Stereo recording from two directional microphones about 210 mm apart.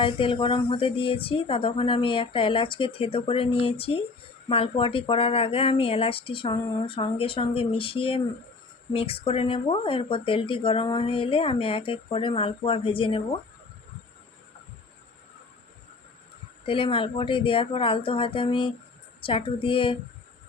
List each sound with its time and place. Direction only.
0.0 s speech: 25° left (ahead or behind)
16.6 s speech: 25° left (ahead or behind)